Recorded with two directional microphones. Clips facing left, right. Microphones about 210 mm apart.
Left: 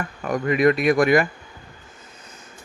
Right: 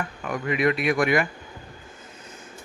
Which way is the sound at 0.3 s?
40° left (ahead or behind).